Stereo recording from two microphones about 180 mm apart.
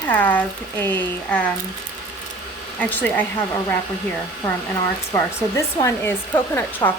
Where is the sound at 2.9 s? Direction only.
10° left (ahead or behind).